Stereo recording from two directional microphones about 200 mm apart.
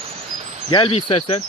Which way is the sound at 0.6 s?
25° left (ahead or behind).